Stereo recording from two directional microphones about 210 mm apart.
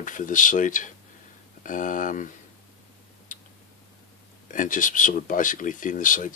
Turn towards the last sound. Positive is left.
turn(degrees=40)  # may be behind; listen again after turning